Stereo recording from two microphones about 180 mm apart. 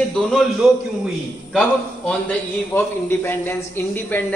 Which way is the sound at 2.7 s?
10° left (ahead or behind).